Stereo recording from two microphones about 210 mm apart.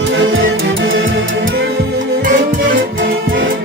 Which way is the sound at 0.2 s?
65° right (ahead or behind).